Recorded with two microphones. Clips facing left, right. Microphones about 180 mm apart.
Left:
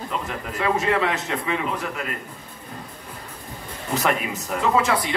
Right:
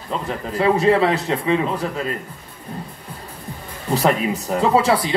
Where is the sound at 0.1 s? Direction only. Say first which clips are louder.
Right 8 dB; 30° right (ahead or behind).